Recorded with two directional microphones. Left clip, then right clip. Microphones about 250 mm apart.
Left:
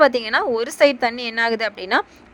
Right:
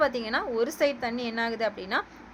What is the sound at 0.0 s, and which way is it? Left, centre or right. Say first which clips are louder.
A woman's voice: left 10 dB; left.